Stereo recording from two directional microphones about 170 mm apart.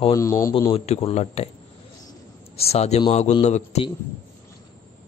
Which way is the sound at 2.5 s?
35° left (ahead or behind).